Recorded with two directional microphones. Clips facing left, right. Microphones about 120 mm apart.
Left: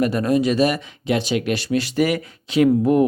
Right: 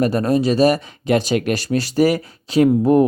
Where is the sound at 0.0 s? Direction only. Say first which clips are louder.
Right 2 dB; 35° right (ahead or behind).